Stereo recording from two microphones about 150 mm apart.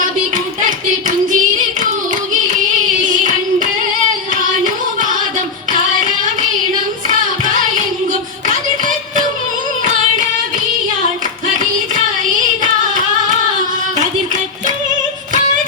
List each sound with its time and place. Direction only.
0.6 s hands: 60° right (ahead or behind)
2.3 s a sound: 60° right (ahead or behind)
7.1 s hands: 60° right (ahead or behind)
8.4 s a sound: 60° right (ahead or behind)
11.4 s hands: 60° right (ahead or behind)
13.9 s music: 55° right (ahead or behind)